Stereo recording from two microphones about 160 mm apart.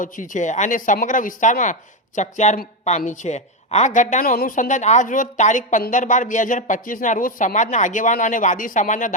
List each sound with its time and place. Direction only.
0.0 s speech: 50° left (ahead or behind)